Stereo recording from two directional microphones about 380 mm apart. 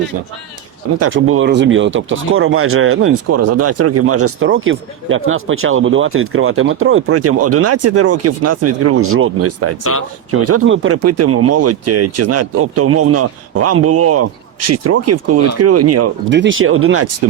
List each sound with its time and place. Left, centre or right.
0.9 s speech: right